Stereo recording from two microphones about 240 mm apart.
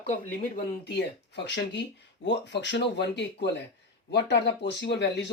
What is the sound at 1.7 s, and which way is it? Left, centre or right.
Speech, left.